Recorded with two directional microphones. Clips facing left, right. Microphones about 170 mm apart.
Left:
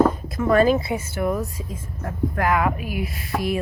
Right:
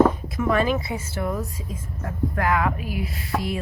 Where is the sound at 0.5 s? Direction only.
40° left (ahead or behind).